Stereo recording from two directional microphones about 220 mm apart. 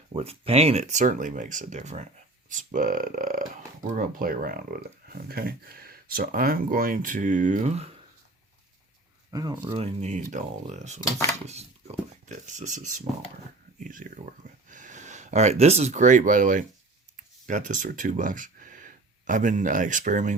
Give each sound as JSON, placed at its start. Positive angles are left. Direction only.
{"t": 0.1, "sound": "speech", "side_deg": -25}
{"t": 9.3, "sound": "speech", "side_deg": -15}